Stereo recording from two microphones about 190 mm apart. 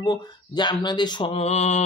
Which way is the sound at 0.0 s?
20° left (ahead or behind).